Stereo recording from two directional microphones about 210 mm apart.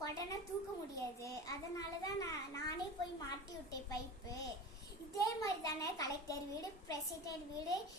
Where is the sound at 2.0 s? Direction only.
15° left (ahead or behind).